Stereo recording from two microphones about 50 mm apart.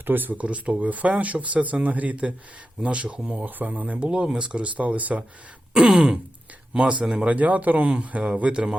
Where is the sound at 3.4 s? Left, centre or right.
Right.